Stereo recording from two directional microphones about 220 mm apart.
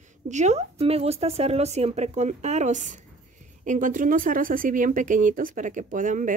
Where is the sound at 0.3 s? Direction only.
30° right (ahead or behind).